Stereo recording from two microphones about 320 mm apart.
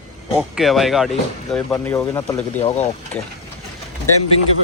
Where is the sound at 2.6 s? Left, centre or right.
Left.